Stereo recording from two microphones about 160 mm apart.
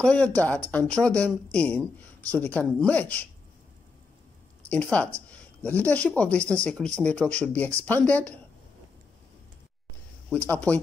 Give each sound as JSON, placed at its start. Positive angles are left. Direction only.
{"t": 0.0, "sound": "speech", "side_deg": 10}
{"t": 4.9, "sound": "speech", "side_deg": 10}
{"t": 10.3, "sound": "speech", "side_deg": 10}